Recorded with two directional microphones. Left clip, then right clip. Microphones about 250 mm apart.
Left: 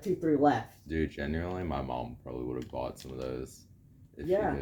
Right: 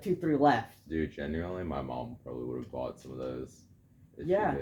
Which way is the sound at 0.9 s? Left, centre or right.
Left.